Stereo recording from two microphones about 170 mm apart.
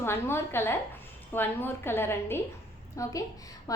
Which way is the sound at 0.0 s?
15° left (ahead or behind).